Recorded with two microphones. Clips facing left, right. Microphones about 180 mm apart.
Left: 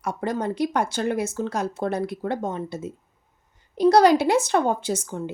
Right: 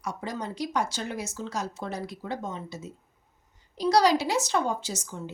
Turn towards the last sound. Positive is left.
turn(degrees=55)  # may be behind; listen again after turning